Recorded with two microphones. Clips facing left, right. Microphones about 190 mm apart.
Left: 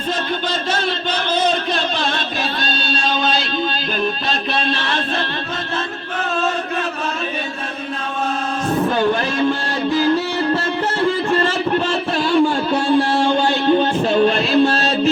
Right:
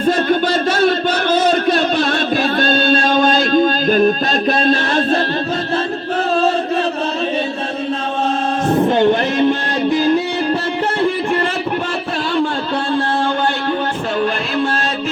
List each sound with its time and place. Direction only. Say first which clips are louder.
0.0 s a sound: right 8 dB; 50° right (ahead or behind)
8.7 s music: right 4 dB; 25° right (ahead or behind)
12.7 s music: left 1 dB; 15° left (ahead or behind)